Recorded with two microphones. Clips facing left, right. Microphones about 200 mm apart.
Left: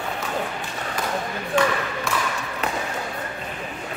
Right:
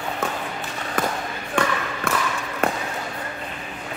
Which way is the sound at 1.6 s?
55° right (ahead or behind).